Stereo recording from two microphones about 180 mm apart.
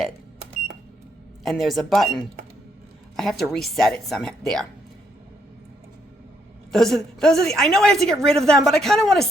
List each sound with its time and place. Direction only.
1.5 s a woman's voice: centre (ahead or behind)
6.7 s a woman's voice: centre (ahead or behind)